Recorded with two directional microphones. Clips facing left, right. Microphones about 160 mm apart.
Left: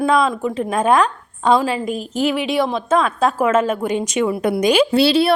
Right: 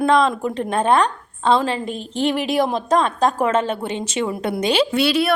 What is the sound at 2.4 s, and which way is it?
Speech, 45° right (ahead or behind).